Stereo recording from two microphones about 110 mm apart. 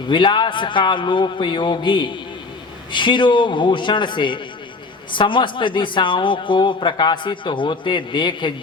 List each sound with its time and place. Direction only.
0.1 s a man's voice: 45° left (ahead or behind)